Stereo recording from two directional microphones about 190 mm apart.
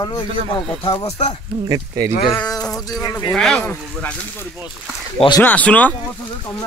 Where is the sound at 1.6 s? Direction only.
20° right (ahead or behind).